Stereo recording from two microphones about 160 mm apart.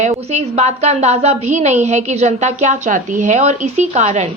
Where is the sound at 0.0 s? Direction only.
45° right (ahead or behind).